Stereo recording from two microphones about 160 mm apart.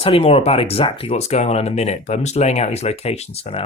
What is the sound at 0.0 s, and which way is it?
Speech, 35° left (ahead or behind).